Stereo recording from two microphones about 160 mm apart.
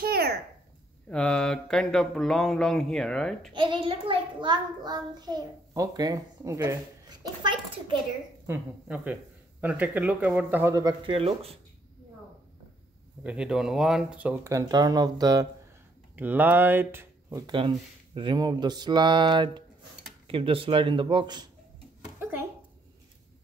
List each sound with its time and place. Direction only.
0.0 s a sound: 75° right (ahead or behind)
1.0 s speech: 5° left (ahead or behind)
3.5 s a child's voice: 30° right (ahead or behind)
8.5 s speech: 10° right (ahead or behind)
11.1 s speech: 40° right (ahead or behind)
13.2 s speech: 5° right (ahead or behind); by 15.4 s 25° right (ahead or behind)
16.2 s a child's voice: 10° right (ahead or behind); by 21.5 s 30° right (ahead or behind)